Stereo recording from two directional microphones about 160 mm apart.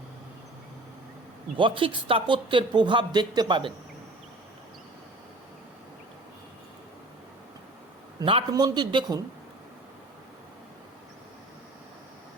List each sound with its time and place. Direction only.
1.5 s speech: 35° right (ahead or behind)
8.2 s a man's voice: 35° right (ahead or behind)